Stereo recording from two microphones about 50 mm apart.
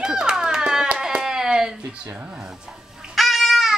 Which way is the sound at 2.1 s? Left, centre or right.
Right.